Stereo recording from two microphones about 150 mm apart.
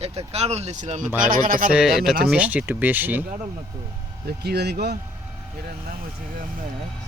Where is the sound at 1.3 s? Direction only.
65° right (ahead or behind).